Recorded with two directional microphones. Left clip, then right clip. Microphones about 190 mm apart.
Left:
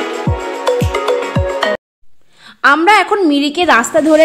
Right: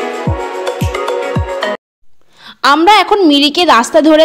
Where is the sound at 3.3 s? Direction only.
20° right (ahead or behind).